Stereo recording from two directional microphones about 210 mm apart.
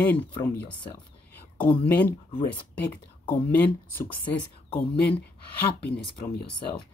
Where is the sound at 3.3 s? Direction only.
10° left (ahead or behind).